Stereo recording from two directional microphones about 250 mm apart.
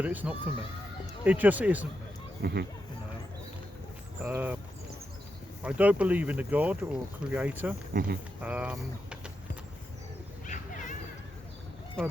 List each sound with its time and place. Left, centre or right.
0.0 s speech: centre
2.4 s speech: right
4.2 s speech: centre
5.6 s speech: centre
7.9 s speech: right
8.4 s speech: centre
10.4 s a sound: left
12.0 s speech: centre